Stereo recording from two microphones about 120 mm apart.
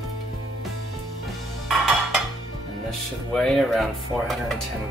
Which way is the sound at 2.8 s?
5° left (ahead or behind).